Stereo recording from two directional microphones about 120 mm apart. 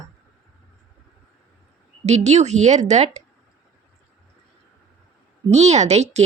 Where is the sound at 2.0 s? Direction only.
70° right (ahead or behind).